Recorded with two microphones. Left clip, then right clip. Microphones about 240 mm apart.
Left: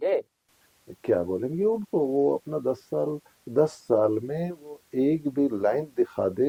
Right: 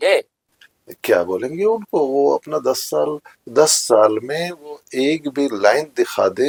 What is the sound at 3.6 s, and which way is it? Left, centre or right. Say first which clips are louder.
Speech: right 9 dB; centre.